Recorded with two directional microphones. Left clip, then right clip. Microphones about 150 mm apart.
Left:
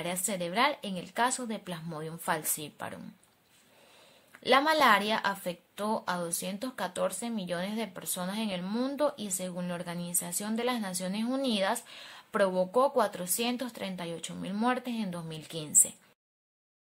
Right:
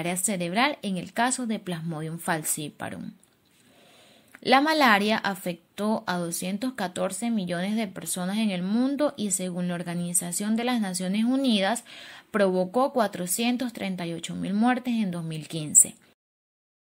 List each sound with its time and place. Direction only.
0.0 s a woman's voice: 15° right (ahead or behind)
4.3 s a woman's voice: 20° right (ahead or behind)